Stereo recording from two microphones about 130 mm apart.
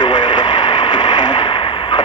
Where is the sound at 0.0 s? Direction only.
35° left (ahead or behind).